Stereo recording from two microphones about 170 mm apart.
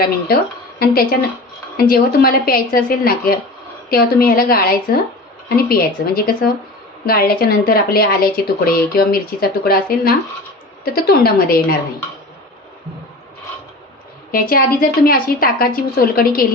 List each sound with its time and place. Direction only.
1.7 s a woman's voice: 60° left (ahead or behind)
14.3 s a woman's voice: 60° left (ahead or behind)